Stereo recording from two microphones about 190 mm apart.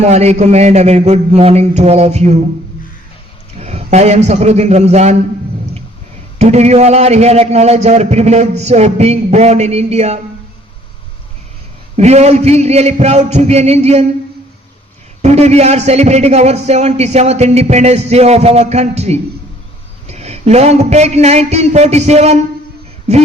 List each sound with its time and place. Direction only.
0.0 s a man's voice: 35° right (ahead or behind)
3.6 s a man's voice: 35° right (ahead or behind)
6.4 s a man's voice: 35° right (ahead or behind)
11.9 s a man's voice: 35° right (ahead or behind)
15.2 s a man's voice: 35° right (ahead or behind)